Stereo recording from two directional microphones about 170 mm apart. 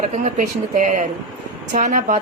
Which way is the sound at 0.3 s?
50° right (ahead or behind).